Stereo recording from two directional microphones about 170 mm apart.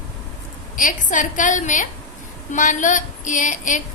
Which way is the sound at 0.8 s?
50° left (ahead or behind).